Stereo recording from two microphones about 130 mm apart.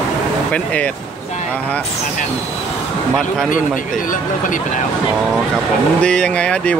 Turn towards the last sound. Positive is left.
turn(degrees=10)  # may be behind; listen again after turning